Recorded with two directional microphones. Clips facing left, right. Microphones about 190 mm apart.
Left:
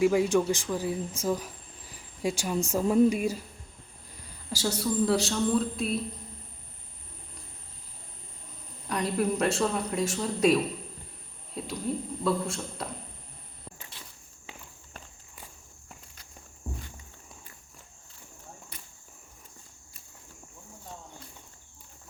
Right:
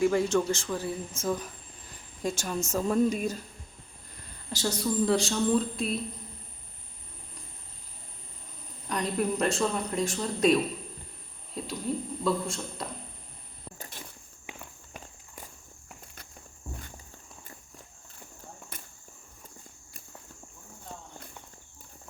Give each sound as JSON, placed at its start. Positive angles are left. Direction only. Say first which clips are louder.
{"t": 0.0, "sound": "speech", "louder": "left 2 dB", "side_deg": 10}
{"t": 4.5, "sound": "speech", "louder": "even", "side_deg": 5}
{"t": 8.9, "sound": "speech", "louder": "left 1 dB", "side_deg": 5}
{"t": 13.7, "sound": "a sound", "louder": "right 5 dB", "side_deg": -40}
{"t": 18.7, "sound": "cricket", "louder": "right 3 dB", "side_deg": -50}